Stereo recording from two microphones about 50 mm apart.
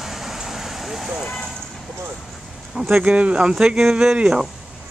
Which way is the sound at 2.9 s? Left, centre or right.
Right.